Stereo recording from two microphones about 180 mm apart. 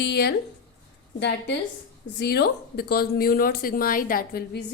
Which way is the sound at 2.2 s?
65° left (ahead or behind).